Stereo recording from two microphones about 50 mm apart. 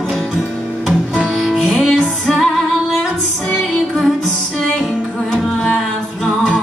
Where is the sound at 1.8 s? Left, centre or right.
Centre.